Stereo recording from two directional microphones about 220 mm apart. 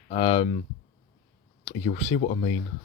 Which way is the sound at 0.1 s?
25° left (ahead or behind).